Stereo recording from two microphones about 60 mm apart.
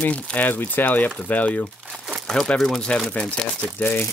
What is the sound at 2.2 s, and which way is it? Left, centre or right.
Speech, centre.